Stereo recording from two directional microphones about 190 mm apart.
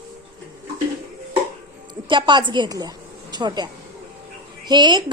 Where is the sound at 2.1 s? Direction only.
25° right (ahead or behind).